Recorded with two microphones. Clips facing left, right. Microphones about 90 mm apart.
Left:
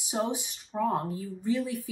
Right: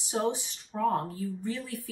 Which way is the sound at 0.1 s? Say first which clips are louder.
Right 1 dB; 10° left (ahead or behind).